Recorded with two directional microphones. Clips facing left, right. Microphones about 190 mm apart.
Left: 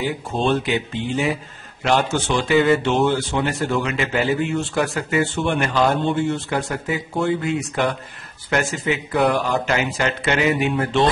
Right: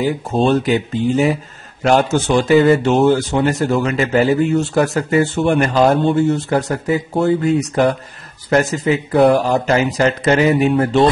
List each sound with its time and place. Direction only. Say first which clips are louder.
0.0 s speech: right 6 dB; 40° right (ahead or behind)